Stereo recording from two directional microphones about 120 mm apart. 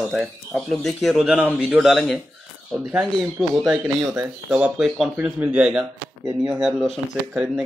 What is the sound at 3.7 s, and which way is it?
Speech, 15° right (ahead or behind).